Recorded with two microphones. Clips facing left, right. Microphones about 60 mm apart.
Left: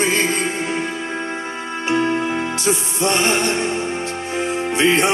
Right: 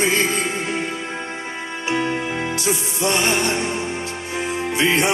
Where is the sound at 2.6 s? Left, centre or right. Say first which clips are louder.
Left 2 dB; left.